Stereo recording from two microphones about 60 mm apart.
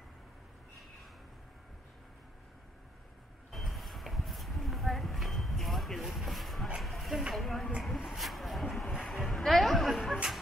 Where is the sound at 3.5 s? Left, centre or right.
Centre.